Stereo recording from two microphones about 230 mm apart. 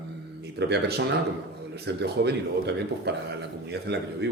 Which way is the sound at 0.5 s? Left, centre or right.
Right.